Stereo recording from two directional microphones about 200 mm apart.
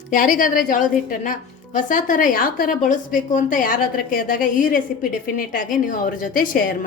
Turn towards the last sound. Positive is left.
turn(degrees=45)  # may be behind; listen again after turning